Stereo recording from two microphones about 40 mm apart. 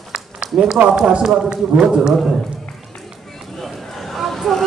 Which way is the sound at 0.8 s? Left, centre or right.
Right.